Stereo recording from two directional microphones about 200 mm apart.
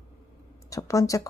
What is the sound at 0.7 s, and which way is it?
Speech, 15° left (ahead or behind).